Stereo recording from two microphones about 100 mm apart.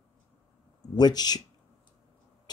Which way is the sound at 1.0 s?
45° left (ahead or behind).